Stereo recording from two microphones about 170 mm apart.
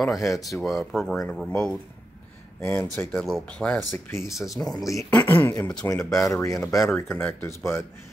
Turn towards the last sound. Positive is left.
turn(degrees=15)  # may be behind; listen again after turning